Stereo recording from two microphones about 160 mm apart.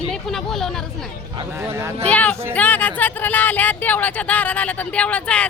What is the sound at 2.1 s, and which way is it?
Speech, 10° left (ahead or behind).